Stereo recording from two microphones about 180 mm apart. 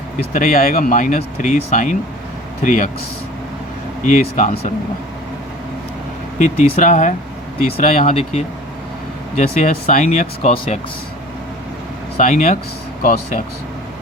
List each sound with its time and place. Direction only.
0.2 s speech: 50° left (ahead or behind)
4.0 s speech: 45° left (ahead or behind)
6.4 s speech: 45° left (ahead or behind)
8.1 s speech: 35° left (ahead or behind)
9.6 s speech: 45° left (ahead or behind)
12.1 s speech: 45° left (ahead or behind)